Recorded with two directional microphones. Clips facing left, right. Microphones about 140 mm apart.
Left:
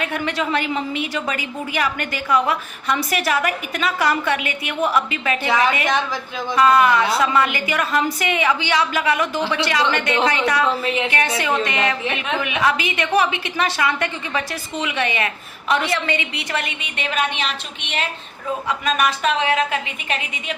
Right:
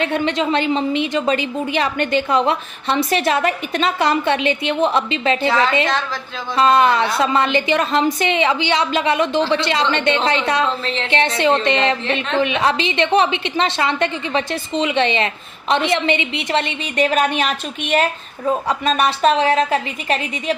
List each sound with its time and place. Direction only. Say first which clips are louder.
0.0 s a woman's voice: right 4 dB; 25° right (ahead or behind)
5.5 s a woman's voice: left 1 dB; 15° left (ahead or behind)
6.6 s a woman's voice: right 1 dB; 25° right (ahead or behind)
10.8 s a woman's voice: left 2 dB; 10° left (ahead or behind)
11.3 s a woman's voice: right 5 dB; 25° right (ahead or behind)
17.0 s a woman's voice: right 6 dB; 40° right (ahead or behind)
18.7 s a woman's voice: left 2 dB; 30° right (ahead or behind)